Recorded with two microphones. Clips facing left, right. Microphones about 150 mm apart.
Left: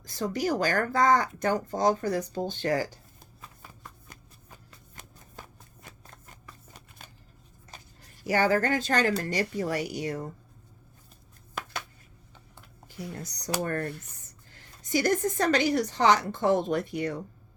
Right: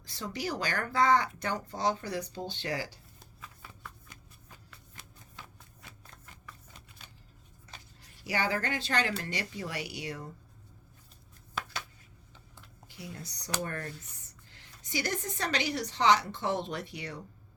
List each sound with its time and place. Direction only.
0.0 s a sound: 45° left (ahead or behind)
8.2 s a woman's voice: 45° left (ahead or behind)
11.6 s a sound: 45° left (ahead or behind)
12.3 s computer keyboard: 50° left (ahead or behind)
13.6 s speech: 55° left (ahead or behind)
14.5 s a woman's voice: 45° left (ahead or behind)